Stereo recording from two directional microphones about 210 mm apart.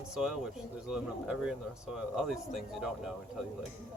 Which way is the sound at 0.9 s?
5° right (ahead or behind).